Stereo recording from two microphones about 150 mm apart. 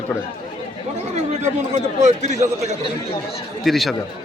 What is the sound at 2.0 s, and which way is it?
Speech, 50° right (ahead or behind).